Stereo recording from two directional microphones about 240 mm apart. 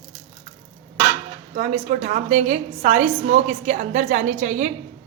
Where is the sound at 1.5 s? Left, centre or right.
Right.